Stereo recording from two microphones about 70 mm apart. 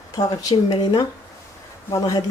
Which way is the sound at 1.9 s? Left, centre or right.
Left.